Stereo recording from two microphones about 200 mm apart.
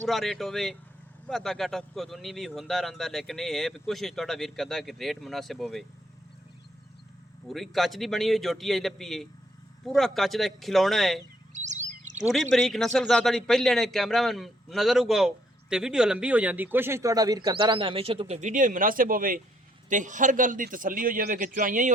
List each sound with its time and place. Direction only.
0.0 s speech: centre (ahead or behind)
7.4 s speech: centre (ahead or behind)
11.5 s bird: 35° right (ahead or behind)
12.3 s a man's voice: centre (ahead or behind); by 21.9 s 40° right (ahead or behind)